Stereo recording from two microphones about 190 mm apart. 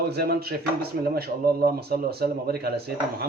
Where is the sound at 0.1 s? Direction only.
55° right (ahead or behind).